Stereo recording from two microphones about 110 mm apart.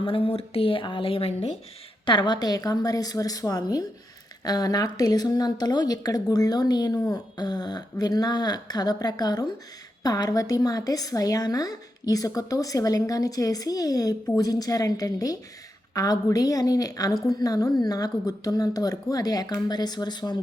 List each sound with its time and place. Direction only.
0.0 s speech: 55° left (ahead or behind)
2.0 s a woman's voice: 45° left (ahead or behind)